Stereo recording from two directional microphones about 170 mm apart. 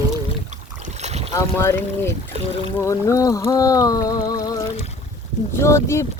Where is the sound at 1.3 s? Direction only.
15° left (ahead or behind).